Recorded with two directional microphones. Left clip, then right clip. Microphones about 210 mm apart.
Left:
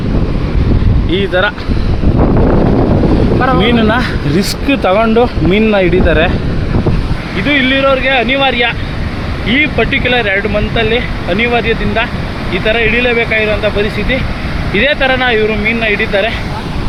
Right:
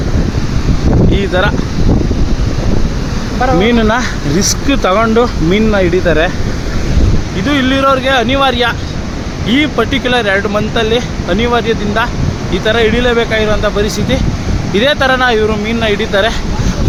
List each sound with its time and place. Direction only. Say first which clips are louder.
1.1 s speech: left 5 dB; 5° right (ahead or behind)
3.6 s speech: even; 5° left (ahead or behind)
7.4 s speech: left 1 dB; 15° right (ahead or behind)